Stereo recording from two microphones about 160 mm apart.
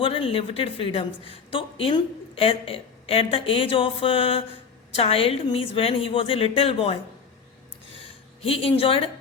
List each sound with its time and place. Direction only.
0.0 s a woman's voice: 35° left (ahead or behind)
8.0 s speech: 35° left (ahead or behind)